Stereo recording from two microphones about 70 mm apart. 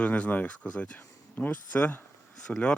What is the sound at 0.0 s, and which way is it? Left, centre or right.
Speech, left.